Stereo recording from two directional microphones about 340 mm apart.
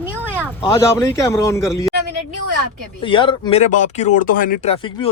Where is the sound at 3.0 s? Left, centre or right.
Centre.